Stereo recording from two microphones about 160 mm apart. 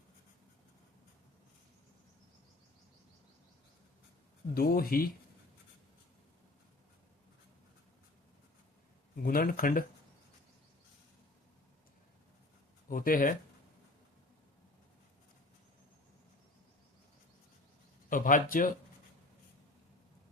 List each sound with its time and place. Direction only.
4.5 s speech: 70° left (ahead or behind)
9.2 s speech: 65° left (ahead or behind)
12.9 s speech: 60° left (ahead or behind)
18.1 s speech: 55° left (ahead or behind)